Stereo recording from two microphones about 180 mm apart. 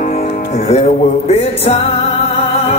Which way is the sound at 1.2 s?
35° left (ahead or behind).